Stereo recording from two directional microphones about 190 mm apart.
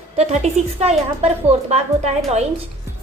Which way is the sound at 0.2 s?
35° right (ahead or behind).